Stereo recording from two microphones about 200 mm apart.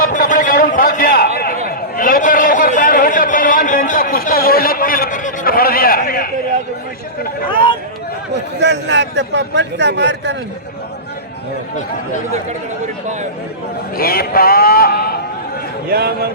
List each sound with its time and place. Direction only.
0.0 s a sound: 45° left (ahead or behind)
1.4 s a man's voice: 45° left (ahead or behind)
8.5 s a man's voice: 60° right (ahead or behind)
13.9 s a man's voice: 50° left (ahead or behind)
15.9 s speech: 50° right (ahead or behind)